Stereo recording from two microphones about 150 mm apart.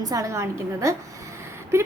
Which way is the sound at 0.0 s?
25° right (ahead or behind).